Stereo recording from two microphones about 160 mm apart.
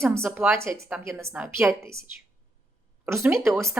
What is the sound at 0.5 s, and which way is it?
Speech, 20° right (ahead or behind).